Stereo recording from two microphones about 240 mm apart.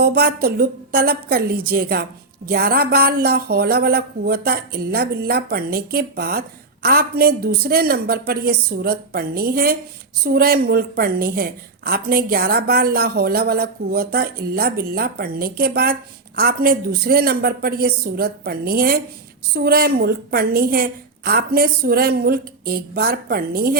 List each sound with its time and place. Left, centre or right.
0.0 s a woman's voice: right